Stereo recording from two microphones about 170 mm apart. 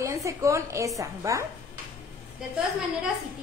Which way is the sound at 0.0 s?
20° right (ahead or behind).